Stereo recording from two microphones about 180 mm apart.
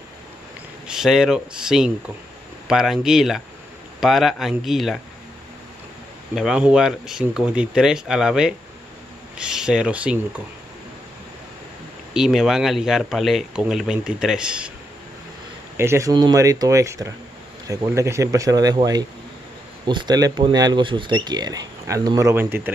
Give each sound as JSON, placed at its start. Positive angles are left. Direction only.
{"t": 0.8, "sound": "speech", "side_deg": 0}
{"t": 6.3, "sound": "speech", "side_deg": -5}
{"t": 12.1, "sound": "speech", "side_deg": -5}
{"t": 15.8, "sound": "speech", "side_deg": -15}